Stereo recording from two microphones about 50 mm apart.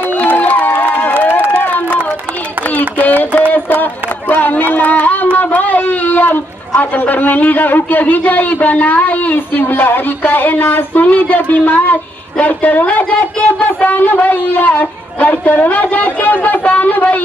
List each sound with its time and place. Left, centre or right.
0.1 s crowd: left
1.6 s a sound: left
3.5 s speech: left